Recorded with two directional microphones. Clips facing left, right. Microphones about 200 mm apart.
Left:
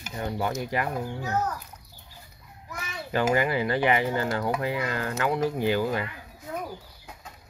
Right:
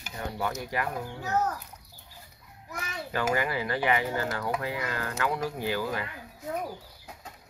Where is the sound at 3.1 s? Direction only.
25° left (ahead or behind).